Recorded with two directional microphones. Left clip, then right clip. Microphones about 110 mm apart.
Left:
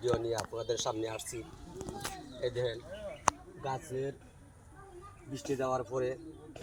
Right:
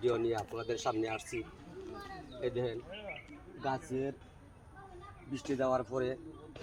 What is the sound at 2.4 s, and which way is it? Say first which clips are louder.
Speech: left 2 dB; 45° right (ahead or behind).